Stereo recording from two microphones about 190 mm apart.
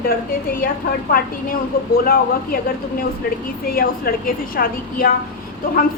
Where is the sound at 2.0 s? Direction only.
50° left (ahead or behind).